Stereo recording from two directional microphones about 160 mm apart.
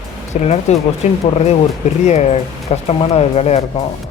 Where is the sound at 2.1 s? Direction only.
45° left (ahead or behind).